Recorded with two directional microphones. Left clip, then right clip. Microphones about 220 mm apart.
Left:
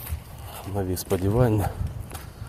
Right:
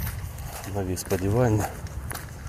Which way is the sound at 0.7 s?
20° left (ahead or behind).